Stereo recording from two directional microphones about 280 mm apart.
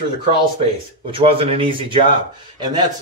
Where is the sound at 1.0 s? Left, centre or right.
Centre.